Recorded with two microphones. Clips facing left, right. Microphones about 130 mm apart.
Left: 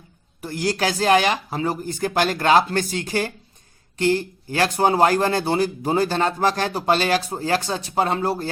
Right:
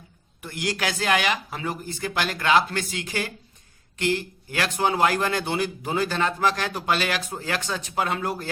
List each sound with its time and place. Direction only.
0.4 s speech: 35° left (ahead or behind)